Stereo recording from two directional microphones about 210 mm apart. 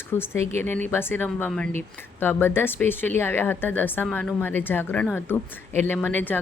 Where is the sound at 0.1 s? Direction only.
10° left (ahead or behind).